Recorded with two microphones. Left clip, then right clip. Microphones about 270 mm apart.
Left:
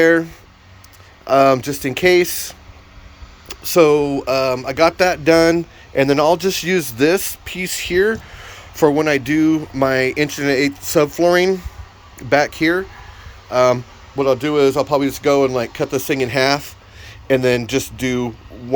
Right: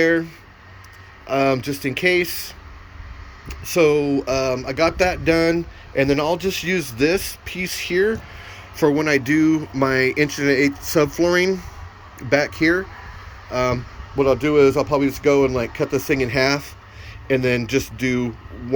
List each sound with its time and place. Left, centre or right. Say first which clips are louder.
0.0 s speech: left 5 dB; centre
1.3 s speech: left 7 dB; centre